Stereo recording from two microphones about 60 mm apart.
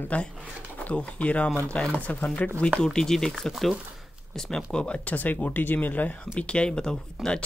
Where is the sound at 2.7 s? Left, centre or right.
Centre.